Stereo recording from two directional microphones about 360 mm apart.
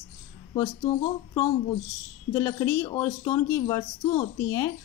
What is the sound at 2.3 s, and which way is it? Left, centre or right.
A woman's voice, centre.